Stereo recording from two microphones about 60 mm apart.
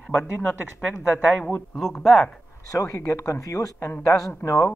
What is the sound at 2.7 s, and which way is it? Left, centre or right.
Speech, left.